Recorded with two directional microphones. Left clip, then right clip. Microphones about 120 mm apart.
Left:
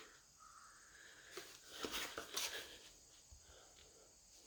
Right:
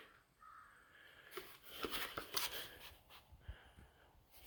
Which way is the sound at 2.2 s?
55° right (ahead or behind).